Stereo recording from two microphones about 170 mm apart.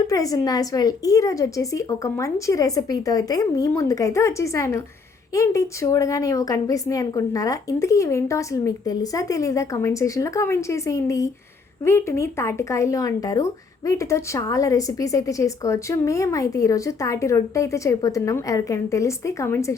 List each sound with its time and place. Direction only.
0.1 s a woman's voice: 20° left (ahead or behind)